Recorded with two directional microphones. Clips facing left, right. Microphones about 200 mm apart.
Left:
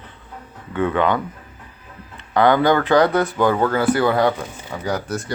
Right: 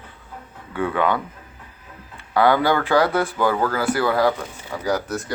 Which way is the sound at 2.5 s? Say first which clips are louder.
Left 3 dB; 15° left (ahead or behind).